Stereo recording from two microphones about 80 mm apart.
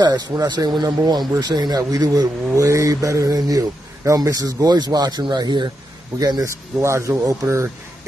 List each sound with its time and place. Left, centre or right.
0.0 s speech: right
6.4 s speech: right